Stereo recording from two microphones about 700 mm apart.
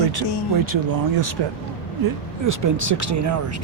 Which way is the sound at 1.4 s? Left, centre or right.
Right.